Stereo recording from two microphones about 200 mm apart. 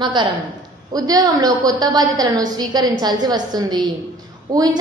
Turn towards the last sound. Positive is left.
turn(degrees=-20)  # may be behind; listen again after turning